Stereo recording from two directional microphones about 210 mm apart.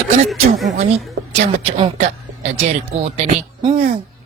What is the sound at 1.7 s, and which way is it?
Speech, 30° right (ahead or behind).